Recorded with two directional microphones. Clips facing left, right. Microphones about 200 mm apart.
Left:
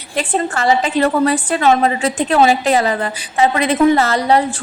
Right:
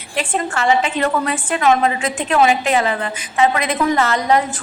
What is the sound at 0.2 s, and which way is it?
A woman's voice, 35° left (ahead or behind).